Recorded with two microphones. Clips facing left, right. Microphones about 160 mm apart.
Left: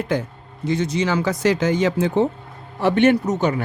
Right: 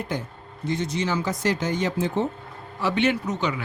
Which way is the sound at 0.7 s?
90° left.